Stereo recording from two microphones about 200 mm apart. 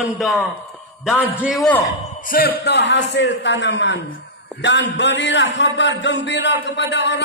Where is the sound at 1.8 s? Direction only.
45° left (ahead or behind).